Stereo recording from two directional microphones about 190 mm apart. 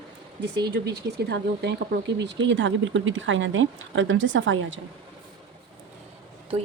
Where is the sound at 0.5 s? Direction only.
60° right (ahead or behind); by 4.8 s 80° right.